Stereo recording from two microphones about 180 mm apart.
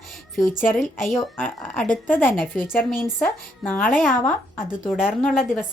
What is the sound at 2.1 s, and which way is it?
A woman's voice, 10° left (ahead or behind).